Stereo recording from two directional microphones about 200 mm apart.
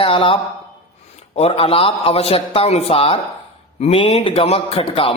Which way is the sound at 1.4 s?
30° left (ahead or behind).